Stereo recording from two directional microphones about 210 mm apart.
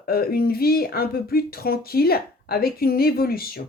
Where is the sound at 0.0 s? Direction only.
45° left (ahead or behind).